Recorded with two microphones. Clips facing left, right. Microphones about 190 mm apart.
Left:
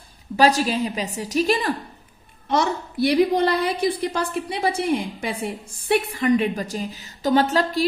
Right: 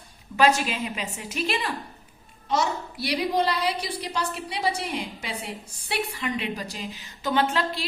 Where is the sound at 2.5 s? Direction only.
55° left (ahead or behind).